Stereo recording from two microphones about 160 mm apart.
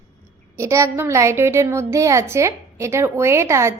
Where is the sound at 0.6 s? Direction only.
20° right (ahead or behind).